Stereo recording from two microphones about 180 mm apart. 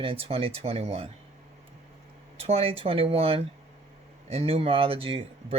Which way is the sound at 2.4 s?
35° right (ahead or behind).